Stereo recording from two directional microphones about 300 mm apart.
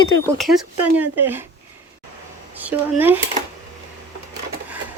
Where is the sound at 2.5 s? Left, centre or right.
Centre.